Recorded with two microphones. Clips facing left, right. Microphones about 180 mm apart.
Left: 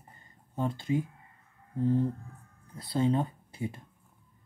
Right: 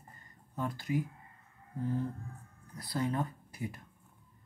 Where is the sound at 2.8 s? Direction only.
25° left (ahead or behind).